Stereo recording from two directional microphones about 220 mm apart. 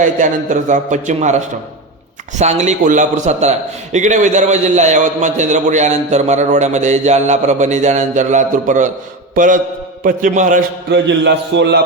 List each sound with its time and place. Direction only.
0.0 s a man's voice: 35° right (ahead or behind)
10.9 s a man's voice: 50° right (ahead or behind)